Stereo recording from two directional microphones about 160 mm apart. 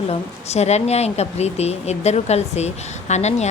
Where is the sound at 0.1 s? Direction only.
40° left (ahead or behind).